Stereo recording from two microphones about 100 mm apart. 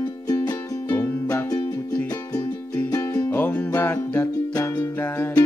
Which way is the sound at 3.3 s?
20° left (ahead or behind).